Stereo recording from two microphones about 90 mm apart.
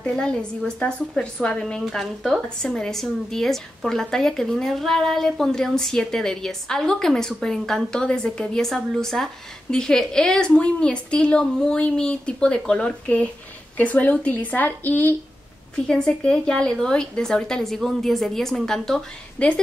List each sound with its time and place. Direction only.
0.0 s a woman's voice: 10° left (ahead or behind)
15.7 s a woman's voice: 10° left (ahead or behind)